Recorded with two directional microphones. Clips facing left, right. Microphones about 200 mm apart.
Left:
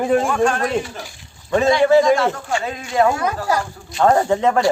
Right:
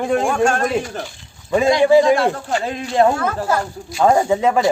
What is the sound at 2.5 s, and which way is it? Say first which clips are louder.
Speech: right 2 dB; 35° right (ahead or behind).